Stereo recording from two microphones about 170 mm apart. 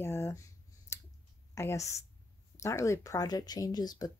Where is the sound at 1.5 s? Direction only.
15° left (ahead or behind).